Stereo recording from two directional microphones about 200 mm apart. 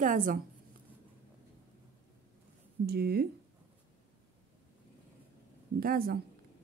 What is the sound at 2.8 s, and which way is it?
Speech, 50° right (ahead or behind).